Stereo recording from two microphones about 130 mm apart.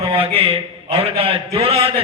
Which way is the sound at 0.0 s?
45° right (ahead or behind).